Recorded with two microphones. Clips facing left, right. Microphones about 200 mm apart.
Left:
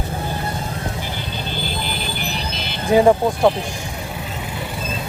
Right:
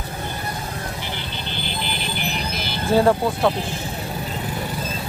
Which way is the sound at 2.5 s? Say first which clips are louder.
Even; 25° left (ahead or behind).